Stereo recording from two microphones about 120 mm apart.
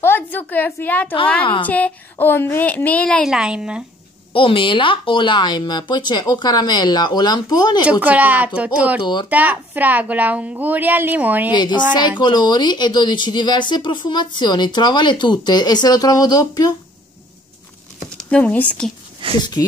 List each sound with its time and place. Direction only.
0.0 s a woman's voice: 15° left (ahead or behind)
1.4 s a woman's voice: 45° left (ahead or behind)
1.7 s a woman's voice: 15° left (ahead or behind)
3.3 s a woman's voice: 5° right (ahead or behind)
4.3 s speech: 45° left (ahead or behind)
8.0 s a woman's voice: 15° right (ahead or behind)
9.0 s speech: 35° left (ahead or behind)
9.3 s a woman's voice: 15° right (ahead or behind)
11.5 s speech: 35° left (ahead or behind)
18.3 s a woman's voice: 15° left (ahead or behind)
19.2 s speech: 45° right (ahead or behind)